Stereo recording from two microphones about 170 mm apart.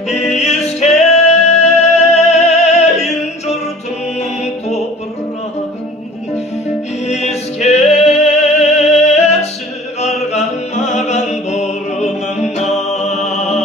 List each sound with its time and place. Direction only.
0.1 s music: 40° left (ahead or behind)
4.2 s music: 40° left (ahead or behind)
7.1 s music: 40° left (ahead or behind)